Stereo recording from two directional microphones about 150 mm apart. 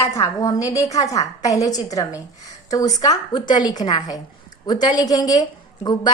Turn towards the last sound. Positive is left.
turn(degrees=30)  # may be behind; listen again after turning